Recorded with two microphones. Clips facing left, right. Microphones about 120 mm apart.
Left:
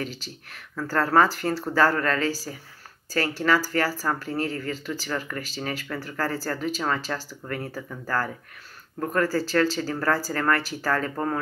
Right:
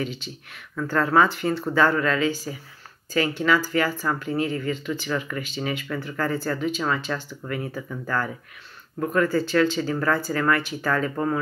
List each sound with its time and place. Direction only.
0.0 s speech: 35° left (ahead or behind)